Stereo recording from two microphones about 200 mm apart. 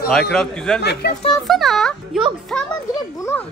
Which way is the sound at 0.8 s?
55° left (ahead or behind).